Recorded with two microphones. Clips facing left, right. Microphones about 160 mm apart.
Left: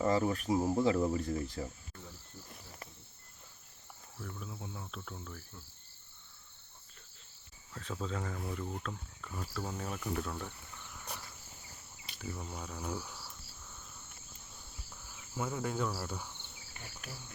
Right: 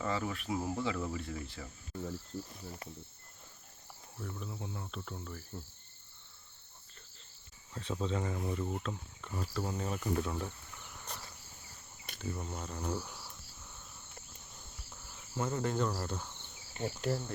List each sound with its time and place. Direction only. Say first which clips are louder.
0.0 s speech: left 6 dB; 35° left (ahead or behind)
2.3 s speech: right 11 dB; 45° right (ahead or behind)
4.2 s speech: right 2 dB; centre (ahead or behind)
7.7 s speech: right 3 dB; 20° right (ahead or behind)
8.1 s speech: right 3 dB; 5° right (ahead or behind)
11.1 s insect: left 1 dB; 10° left (ahead or behind)
12.2 s speech: right 2 dB; centre (ahead or behind)
15.1 s insect: right 2 dB; centre (ahead or behind)
16.7 s insect: right 15 dB; 25° right (ahead or behind)